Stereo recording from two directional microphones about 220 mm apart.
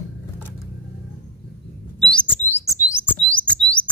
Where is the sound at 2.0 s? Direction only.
5° left (ahead or behind).